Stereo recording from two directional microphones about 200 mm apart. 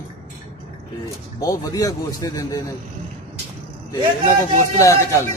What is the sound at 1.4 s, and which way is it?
A man's voice, 15° left (ahead or behind).